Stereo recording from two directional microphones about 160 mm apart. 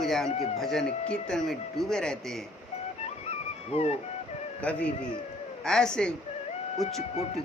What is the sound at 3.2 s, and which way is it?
Music, 40° left (ahead or behind).